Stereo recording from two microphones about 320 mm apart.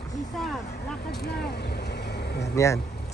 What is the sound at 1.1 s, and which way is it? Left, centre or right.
Vehicle, left.